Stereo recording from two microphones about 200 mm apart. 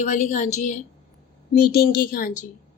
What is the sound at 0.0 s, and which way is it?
Speech, 35° left (ahead or behind).